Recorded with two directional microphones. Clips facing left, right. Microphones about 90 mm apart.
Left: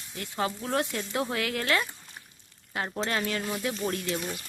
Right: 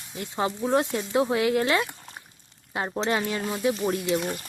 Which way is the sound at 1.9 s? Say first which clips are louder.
Right 4 dB; 50° right (ahead or behind).